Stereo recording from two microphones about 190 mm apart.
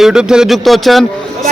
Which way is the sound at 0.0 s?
5° right (ahead or behind).